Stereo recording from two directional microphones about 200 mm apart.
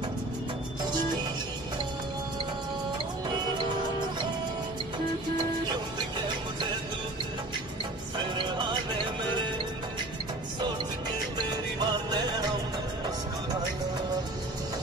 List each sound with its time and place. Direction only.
8.2 s music: 25° right (ahead or behind)
11.5 s music: 20° right (ahead or behind)